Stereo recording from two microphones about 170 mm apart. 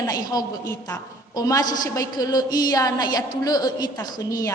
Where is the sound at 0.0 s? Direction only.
20° left (ahead or behind).